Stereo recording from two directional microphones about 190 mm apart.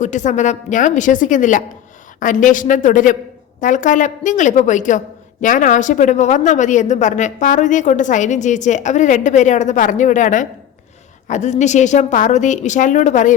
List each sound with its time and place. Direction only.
0.0 s a woman's voice: 40° left (ahead or behind)